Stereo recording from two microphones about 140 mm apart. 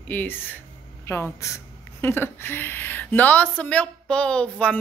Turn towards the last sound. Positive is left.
turn(degrees=10)  # may be behind; listen again after turning